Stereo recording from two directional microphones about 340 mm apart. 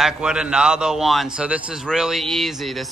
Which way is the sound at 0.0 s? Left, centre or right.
Centre.